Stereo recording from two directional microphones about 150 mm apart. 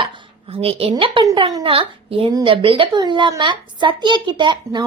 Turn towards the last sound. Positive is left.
turn(degrees=-30)  # may be behind; listen again after turning